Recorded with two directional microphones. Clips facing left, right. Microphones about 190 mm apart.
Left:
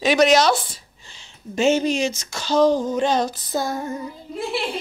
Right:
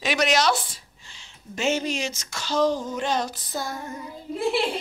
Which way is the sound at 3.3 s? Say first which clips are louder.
Left 7 dB; 40° left (ahead or behind).